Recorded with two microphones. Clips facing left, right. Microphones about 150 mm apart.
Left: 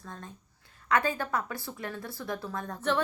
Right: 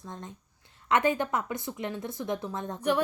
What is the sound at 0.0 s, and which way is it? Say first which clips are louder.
A woman's voice: right 2 dB; 20° right (ahead or behind).